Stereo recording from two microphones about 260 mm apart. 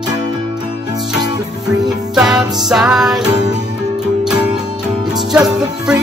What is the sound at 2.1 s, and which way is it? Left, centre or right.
Music, centre.